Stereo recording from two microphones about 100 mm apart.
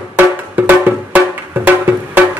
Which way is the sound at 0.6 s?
20° right (ahead or behind).